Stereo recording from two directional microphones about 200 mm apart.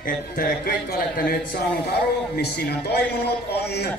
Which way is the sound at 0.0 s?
50° left (ahead or behind).